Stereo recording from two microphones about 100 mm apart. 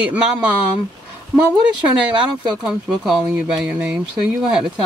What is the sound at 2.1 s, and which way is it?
Speech, 5° right (ahead or behind).